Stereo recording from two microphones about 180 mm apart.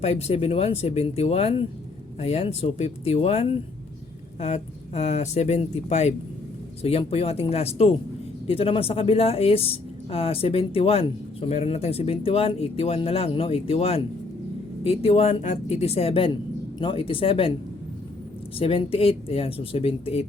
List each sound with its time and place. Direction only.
0.0 s speech: 35° left (ahead or behind)
18.6 s speech: 30° left (ahead or behind)